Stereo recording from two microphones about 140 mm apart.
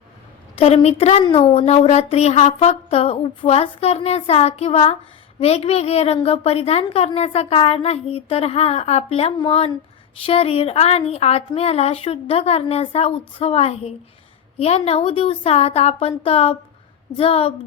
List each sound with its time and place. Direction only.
0.6 s a woman's voice: 50° left (ahead or behind)
1.2 s a woman's voice: 35° left (ahead or behind)
1.6 s a woman's voice: 50° left (ahead or behind)